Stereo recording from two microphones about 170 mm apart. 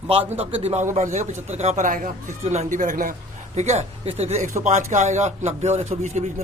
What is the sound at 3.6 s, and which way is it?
A man's voice, 40° right (ahead or behind).